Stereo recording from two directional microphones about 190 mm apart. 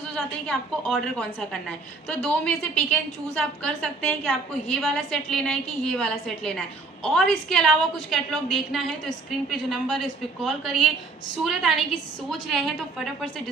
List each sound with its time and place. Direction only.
0.1 s a woman's voice: 5° left (ahead or behind)
2.0 s a woman's voice: 5° left (ahead or behind)